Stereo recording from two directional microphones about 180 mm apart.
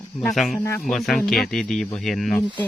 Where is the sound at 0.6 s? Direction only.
10° left (ahead or behind).